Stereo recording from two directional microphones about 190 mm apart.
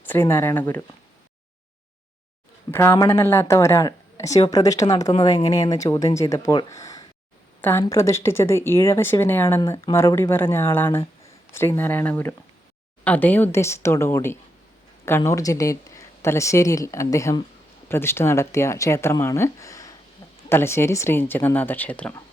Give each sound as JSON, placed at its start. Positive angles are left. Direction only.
{"t": 0.1, "sound": "speech", "side_deg": 10}
{"t": 2.7, "sound": "speech", "side_deg": 15}